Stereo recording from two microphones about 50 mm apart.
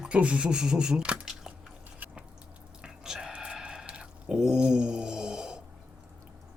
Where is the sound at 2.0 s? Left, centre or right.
Right.